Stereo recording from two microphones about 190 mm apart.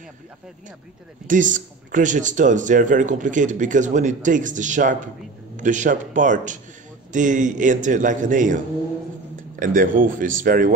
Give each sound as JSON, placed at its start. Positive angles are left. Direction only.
{"t": 1.2, "sound": "a man's voice", "side_deg": -40}
{"t": 9.6, "sound": "speech", "side_deg": -45}